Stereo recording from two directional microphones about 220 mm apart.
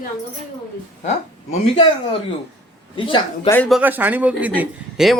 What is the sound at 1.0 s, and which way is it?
Speech, 30° left (ahead or behind).